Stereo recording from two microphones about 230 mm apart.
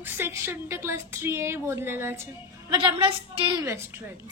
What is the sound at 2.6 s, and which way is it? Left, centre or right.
A woman's voice, right.